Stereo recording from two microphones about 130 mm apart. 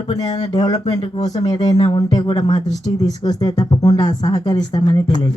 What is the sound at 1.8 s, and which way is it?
Speech, 40° left (ahead or behind).